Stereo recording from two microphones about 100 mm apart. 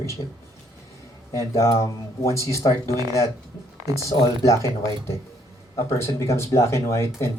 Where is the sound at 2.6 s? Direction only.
50° left (ahead or behind).